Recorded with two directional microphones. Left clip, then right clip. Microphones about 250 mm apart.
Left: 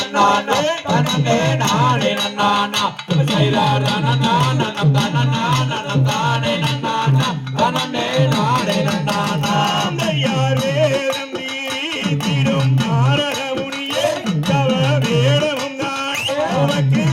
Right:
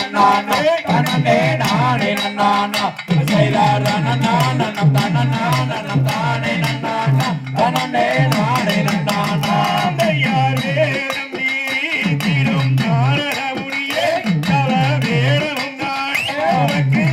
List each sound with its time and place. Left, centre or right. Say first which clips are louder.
0.2 s music: right 1 dB; left
7.6 s music: right 2 dB; centre
12.0 s music: right 1 dB; centre